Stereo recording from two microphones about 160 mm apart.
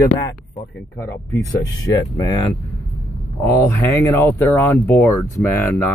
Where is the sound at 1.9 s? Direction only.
20° left (ahead or behind).